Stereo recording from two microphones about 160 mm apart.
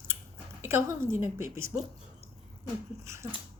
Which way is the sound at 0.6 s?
15° right (ahead or behind).